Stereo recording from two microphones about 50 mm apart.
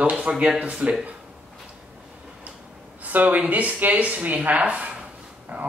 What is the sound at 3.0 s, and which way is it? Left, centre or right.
Speech, right.